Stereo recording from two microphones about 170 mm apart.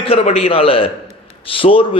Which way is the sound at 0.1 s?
35° left (ahead or behind).